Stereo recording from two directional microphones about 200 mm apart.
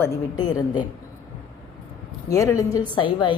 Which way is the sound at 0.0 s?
20° left (ahead or behind).